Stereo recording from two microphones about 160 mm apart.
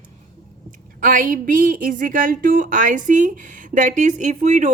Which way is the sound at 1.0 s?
55° right (ahead or behind).